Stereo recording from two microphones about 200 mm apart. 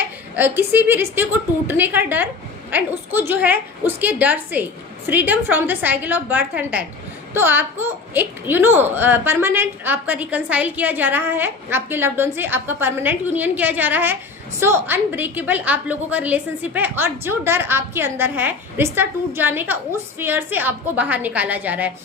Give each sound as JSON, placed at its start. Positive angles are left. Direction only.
{"t": 0.3, "sound": "a woman's voice", "side_deg": -10}